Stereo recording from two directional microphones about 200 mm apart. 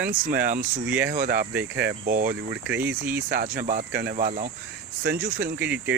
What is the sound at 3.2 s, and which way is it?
Speech, 50° right (ahead or behind).